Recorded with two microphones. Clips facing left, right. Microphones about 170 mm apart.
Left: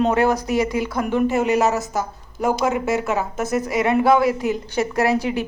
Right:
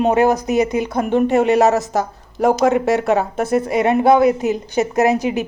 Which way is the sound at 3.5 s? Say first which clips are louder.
Right 3 dB; 30° right (ahead or behind).